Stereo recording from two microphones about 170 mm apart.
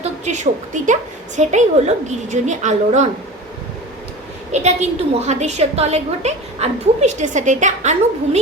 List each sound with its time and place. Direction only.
0.0 s a woman's voice: 45° right (ahead or behind)
4.5 s a woman's voice: 40° right (ahead or behind)